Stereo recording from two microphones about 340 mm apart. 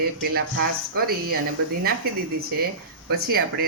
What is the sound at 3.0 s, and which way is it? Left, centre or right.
Speech, right.